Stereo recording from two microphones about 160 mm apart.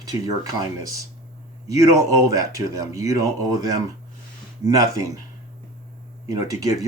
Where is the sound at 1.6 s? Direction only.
20° right (ahead or behind).